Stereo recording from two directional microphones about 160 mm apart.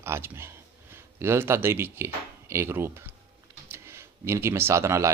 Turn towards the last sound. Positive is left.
turn(degrees=-20)  # may be behind; listen again after turning